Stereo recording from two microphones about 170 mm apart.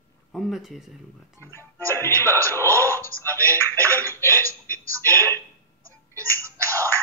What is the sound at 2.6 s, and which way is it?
Speech, 15° right (ahead or behind).